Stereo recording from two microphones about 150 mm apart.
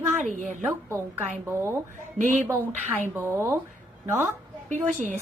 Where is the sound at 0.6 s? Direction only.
15° right (ahead or behind).